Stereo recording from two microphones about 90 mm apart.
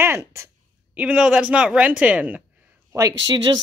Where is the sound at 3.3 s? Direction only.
60° right (ahead or behind).